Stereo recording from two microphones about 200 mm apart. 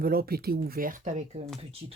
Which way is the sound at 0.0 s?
50° right (ahead or behind).